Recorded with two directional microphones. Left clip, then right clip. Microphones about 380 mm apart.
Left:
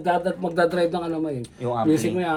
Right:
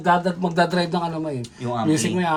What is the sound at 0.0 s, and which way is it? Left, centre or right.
Speech, right.